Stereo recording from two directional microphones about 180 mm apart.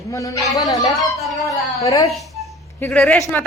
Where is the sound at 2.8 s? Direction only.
5° left (ahead or behind).